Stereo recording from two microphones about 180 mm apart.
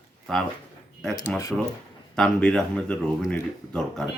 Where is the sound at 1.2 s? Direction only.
15° left (ahead or behind).